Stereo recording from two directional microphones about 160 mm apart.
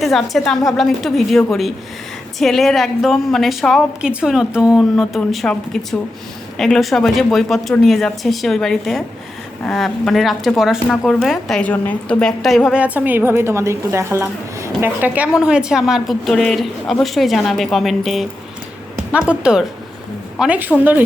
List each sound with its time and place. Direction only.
0.0 s speech: centre (ahead or behind)